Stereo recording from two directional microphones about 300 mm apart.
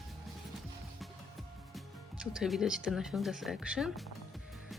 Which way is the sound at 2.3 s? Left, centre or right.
Centre.